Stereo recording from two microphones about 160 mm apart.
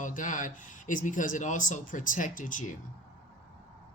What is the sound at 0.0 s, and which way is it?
Speech, 55° left (ahead or behind).